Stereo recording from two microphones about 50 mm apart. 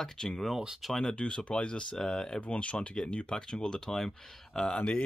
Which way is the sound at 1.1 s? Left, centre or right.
Left.